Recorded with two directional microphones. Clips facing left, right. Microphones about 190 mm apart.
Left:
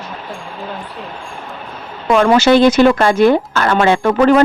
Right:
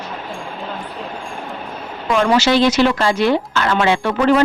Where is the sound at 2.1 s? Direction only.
55° left (ahead or behind).